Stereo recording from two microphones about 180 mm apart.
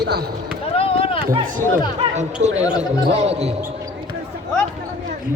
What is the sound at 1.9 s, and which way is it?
Speech, 40° right (ahead or behind).